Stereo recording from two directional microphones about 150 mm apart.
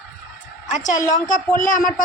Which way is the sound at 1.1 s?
55° left (ahead or behind).